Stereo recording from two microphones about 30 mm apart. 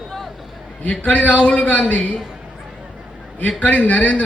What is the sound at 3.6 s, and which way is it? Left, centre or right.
Speech, left.